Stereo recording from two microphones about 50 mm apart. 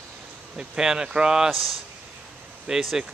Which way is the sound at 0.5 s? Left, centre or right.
Centre.